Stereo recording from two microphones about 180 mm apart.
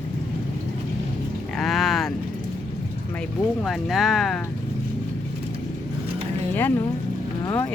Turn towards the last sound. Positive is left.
turn(degrees=15)  # may be behind; listen again after turning